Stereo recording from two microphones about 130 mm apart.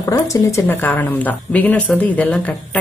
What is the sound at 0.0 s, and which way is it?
Speech, 25° left (ahead or behind).